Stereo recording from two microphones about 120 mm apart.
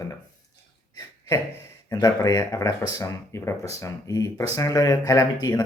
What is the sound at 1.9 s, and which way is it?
Speech, 30° left (ahead or behind).